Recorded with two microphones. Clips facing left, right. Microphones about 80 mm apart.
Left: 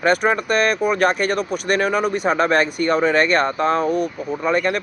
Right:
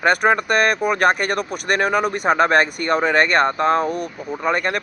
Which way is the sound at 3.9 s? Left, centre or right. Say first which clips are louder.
Left 4 dB; left.